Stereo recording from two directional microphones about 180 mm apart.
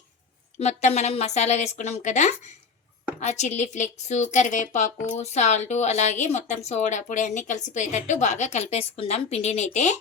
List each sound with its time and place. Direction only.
0.6 s speech: 40° left (ahead or behind)